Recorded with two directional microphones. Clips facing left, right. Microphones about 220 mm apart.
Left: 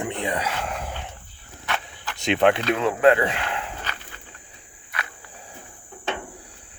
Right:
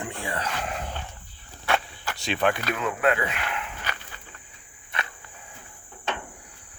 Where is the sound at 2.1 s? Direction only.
20° left (ahead or behind).